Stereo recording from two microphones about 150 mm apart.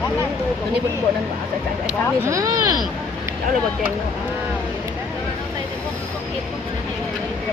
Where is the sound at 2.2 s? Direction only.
20° right (ahead or behind).